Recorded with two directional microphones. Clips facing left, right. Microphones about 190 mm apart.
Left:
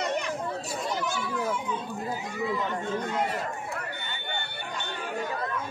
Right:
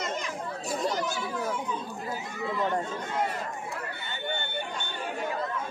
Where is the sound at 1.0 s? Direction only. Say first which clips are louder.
Left 1 dB; 40° right (ahead or behind).